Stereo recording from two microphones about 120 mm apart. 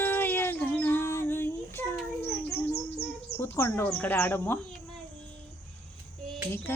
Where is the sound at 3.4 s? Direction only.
20° left (ahead or behind).